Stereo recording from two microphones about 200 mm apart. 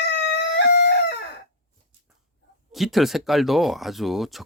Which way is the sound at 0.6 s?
55° left (ahead or behind).